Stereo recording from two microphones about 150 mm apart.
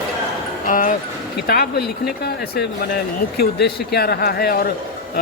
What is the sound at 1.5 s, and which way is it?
Speech, 90° left.